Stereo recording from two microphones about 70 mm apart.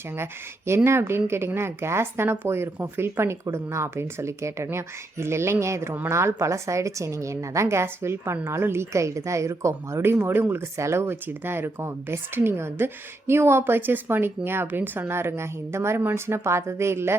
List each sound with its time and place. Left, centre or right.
0.2 s speech: right